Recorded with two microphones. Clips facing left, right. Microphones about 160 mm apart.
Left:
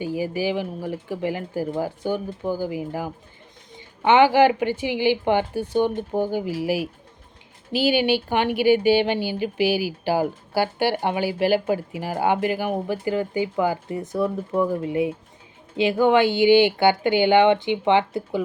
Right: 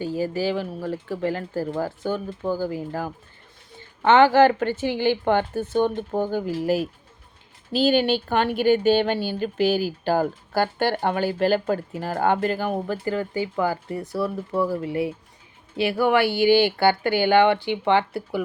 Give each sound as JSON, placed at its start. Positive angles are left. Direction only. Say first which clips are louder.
{"t": 0.0, "sound": "a woman's voice", "louder": "even", "side_deg": 15}